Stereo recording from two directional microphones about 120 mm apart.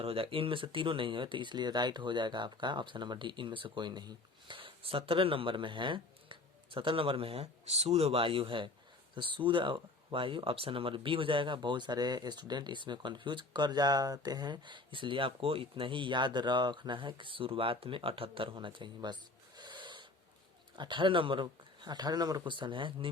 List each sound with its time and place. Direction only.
0.0 s speech: 50° right (ahead or behind)
19.5 s owl: 40° right (ahead or behind)
20.7 s speech: 40° right (ahead or behind)